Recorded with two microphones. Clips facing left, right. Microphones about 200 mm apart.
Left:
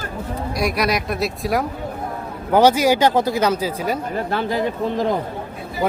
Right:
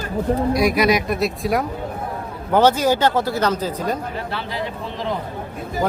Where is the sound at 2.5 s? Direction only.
10° left (ahead or behind).